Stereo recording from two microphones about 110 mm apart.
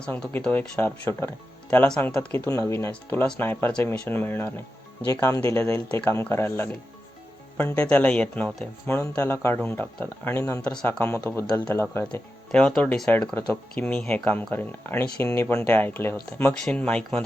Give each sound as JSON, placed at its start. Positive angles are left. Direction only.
{"t": 0.0, "sound": "speech", "side_deg": 15}
{"t": 0.8, "sound": "speech", "side_deg": 15}
{"t": 2.9, "sound": "speech", "side_deg": 15}
{"t": 10.6, "sound": "speech", "side_deg": 10}
{"t": 11.0, "sound": "speech", "side_deg": 20}
{"t": 12.5, "sound": "speech", "side_deg": 10}
{"t": 16.6, "sound": "speech", "side_deg": 10}